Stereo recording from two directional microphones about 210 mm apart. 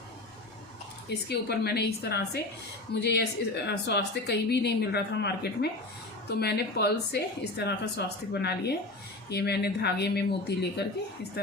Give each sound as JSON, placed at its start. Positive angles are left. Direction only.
{"t": 1.3, "sound": "a woman's voice", "side_deg": 50}